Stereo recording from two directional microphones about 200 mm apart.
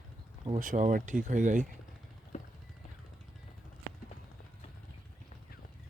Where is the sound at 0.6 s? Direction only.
40° right (ahead or behind).